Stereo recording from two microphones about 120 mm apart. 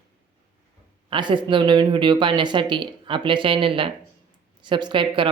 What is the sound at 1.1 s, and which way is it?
Speech, 40° right (ahead or behind).